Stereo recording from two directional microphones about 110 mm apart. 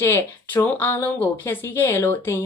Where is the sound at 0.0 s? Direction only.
20° left (ahead or behind).